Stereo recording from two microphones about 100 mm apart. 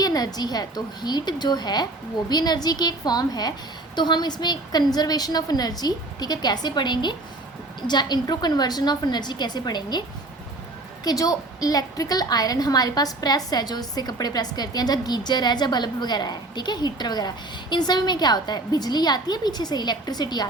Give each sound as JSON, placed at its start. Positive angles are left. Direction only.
{"t": 0.0, "sound": "a woman's voice", "side_deg": 40}
{"t": 11.0, "sound": "a woman's voice", "side_deg": 35}